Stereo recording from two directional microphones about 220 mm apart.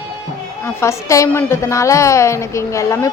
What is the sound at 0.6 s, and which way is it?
A woman's voice, 10° left (ahead or behind).